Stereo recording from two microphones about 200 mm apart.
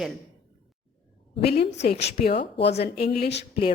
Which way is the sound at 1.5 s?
55° left (ahead or behind).